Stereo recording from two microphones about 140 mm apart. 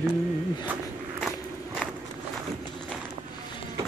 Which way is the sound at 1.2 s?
5° right (ahead or behind).